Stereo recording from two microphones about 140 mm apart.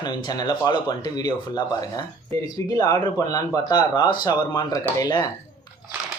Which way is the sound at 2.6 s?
30° left (ahead or behind).